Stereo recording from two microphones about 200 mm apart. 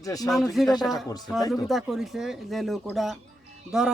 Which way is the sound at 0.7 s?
Centre (ahead or behind).